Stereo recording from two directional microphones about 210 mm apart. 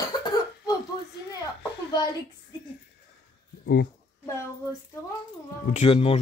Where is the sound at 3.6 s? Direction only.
55° left (ahead or behind).